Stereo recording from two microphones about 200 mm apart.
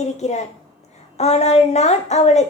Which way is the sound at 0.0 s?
35° left (ahead or behind).